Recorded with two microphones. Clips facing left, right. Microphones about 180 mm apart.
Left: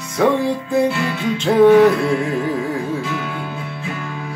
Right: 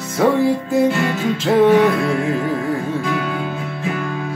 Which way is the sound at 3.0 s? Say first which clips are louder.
Right 3 dB; 50° right (ahead or behind).